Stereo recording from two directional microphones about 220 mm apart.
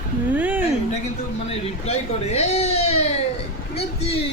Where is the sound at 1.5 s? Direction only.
30° left (ahead or behind).